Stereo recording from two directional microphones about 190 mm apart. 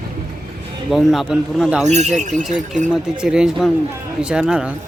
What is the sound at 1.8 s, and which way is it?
Speech, 35° right (ahead or behind).